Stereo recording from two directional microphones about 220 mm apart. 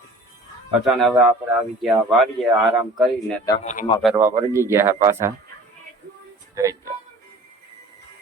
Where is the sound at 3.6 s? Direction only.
30° left (ahead or behind).